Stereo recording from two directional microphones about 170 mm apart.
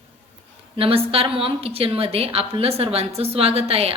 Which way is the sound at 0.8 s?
35° right (ahead or behind).